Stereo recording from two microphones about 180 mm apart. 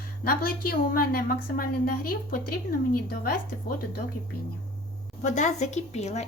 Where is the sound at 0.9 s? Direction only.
55° left (ahead or behind).